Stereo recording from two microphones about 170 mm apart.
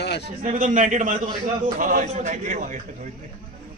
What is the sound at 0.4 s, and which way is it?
A man's voice, 45° right (ahead or behind).